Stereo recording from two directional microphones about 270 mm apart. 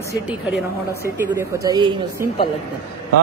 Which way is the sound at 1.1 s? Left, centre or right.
Centre.